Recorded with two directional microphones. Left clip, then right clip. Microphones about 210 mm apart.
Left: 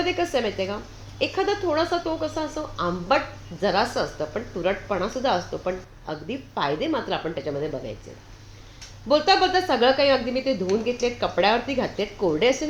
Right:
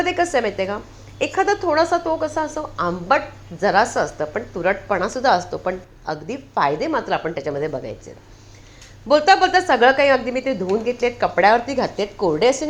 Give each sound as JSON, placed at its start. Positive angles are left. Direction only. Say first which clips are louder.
{"t": 0.0, "sound": "a woman's voice", "louder": "right 5 dB", "side_deg": -15}
{"t": 9.0, "sound": "a woman's voice", "louder": "right 5 dB", "side_deg": -15}